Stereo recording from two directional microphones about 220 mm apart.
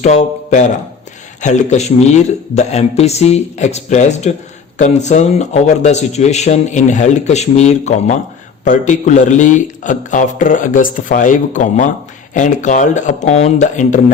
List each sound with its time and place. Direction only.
0.0 s a man's voice: 30° left (ahead or behind)